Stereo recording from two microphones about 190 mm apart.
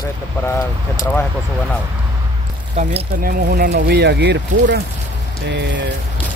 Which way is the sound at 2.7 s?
40° right (ahead or behind).